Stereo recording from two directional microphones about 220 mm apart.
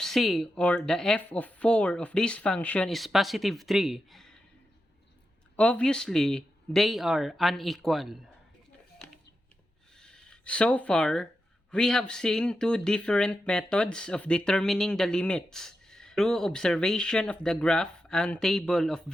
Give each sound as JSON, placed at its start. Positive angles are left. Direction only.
{"t": 0.0, "sound": "speech", "side_deg": 0}
{"t": 5.5, "sound": "speech", "side_deg": 5}
{"t": 10.0, "sound": "speech", "side_deg": 5}